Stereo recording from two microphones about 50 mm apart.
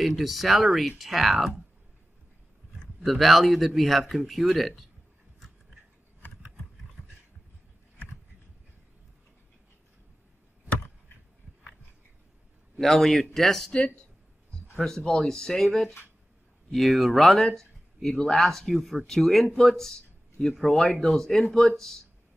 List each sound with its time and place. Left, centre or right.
0.0 s speech: centre
3.0 s speech: centre
12.8 s speech: centre
13.7 s speech: centre
15.0 s speech: centre